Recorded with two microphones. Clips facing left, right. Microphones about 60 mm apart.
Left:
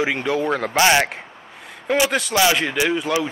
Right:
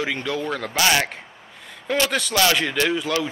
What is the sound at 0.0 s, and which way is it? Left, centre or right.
Speech, left.